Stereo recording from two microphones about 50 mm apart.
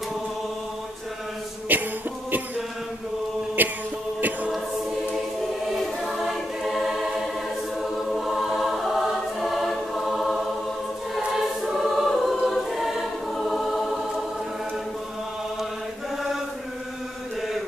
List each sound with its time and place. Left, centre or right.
1.7 s music: right
3.6 s a sound: right
5.7 s choir: centre